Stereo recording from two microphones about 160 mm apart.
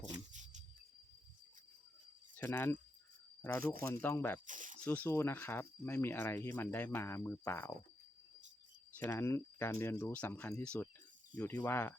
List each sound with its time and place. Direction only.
0.0 s a sound: 50° right (ahead or behind)
2.3 s speech: 10° left (ahead or behind)
4.0 s speech: 15° left (ahead or behind)
4.4 s speech: 55° right (ahead or behind)
4.8 s speech: 10° left (ahead or behind)
9.0 s speech: 15° left (ahead or behind)